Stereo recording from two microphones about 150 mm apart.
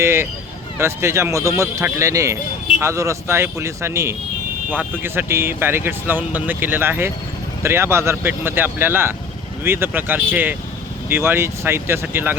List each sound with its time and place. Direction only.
0.0 s speech: 20° right (ahead or behind)